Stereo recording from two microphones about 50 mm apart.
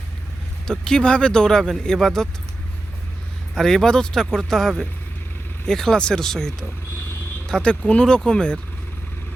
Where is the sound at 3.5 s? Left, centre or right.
Centre.